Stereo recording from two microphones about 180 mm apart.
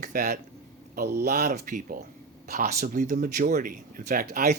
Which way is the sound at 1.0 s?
60° right (ahead or behind).